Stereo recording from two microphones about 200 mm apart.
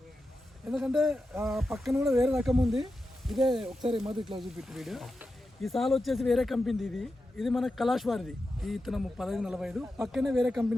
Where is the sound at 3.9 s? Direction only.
25° right (ahead or behind).